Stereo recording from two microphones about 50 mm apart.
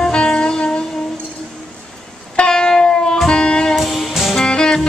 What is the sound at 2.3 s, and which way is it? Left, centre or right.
Music, centre.